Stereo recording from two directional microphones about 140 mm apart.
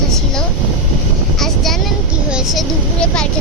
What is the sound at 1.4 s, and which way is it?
Vehicle, centre (ahead or behind).